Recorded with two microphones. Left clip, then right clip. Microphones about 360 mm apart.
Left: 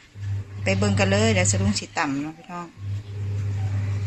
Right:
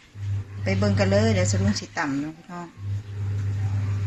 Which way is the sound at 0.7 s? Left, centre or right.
Centre.